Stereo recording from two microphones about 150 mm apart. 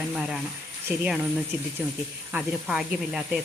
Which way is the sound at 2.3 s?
Centre (ahead or behind).